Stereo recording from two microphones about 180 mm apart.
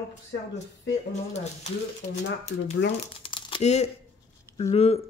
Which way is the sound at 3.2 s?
30° left (ahead or behind).